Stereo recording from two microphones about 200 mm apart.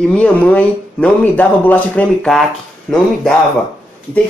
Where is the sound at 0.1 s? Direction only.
5° left (ahead or behind).